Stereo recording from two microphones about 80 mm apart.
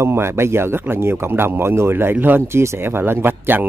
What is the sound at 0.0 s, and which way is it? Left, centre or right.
A man's voice, right.